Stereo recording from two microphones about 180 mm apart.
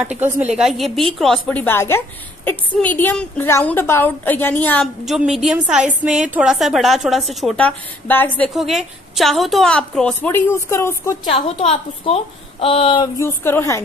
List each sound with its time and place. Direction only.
0.3 s a woman's voice: 5° right (ahead or behind); by 4.8 s 10° left (ahead or behind)
5.0 s a woman's voice: centre (ahead or behind)
6.0 s a woman's voice: 40° right (ahead or behind)
6.3 s a woman's voice: centre (ahead or behind); by 11.1 s 15° left (ahead or behind)
12.0 s speech: 30° left (ahead or behind)
13.2 s a woman's voice: 15° left (ahead or behind)